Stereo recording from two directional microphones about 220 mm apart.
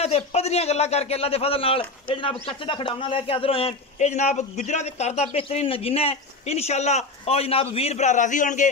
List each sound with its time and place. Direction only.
0.0 s a man's voice: 30° left (ahead or behind)